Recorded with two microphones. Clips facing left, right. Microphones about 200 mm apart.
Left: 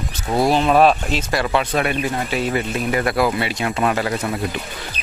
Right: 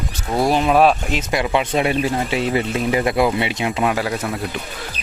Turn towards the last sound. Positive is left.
turn(degrees=0)  # may be behind; listen again after turning